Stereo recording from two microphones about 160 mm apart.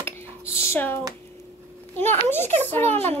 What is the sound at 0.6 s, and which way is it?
A woman's voice, 15° left (ahead or behind).